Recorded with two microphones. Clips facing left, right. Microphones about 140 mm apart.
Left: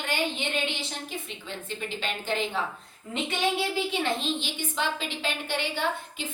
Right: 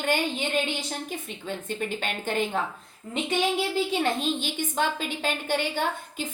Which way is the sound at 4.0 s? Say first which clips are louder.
Right 3 dB; 45° right (ahead or behind).